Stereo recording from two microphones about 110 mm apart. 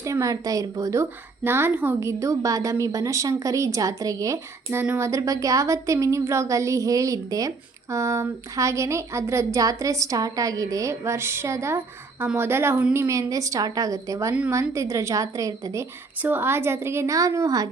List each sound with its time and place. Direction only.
0.0 s a woman's voice: 30° right (ahead or behind)